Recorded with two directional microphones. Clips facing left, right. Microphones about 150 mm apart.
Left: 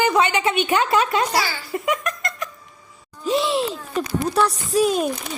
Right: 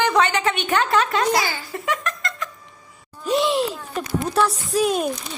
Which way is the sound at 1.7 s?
10° left (ahead or behind).